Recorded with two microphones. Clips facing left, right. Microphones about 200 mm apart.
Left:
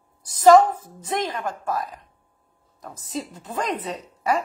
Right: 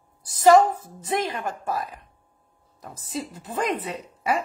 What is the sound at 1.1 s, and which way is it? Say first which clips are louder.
Speech: even; 10° right (ahead or behind).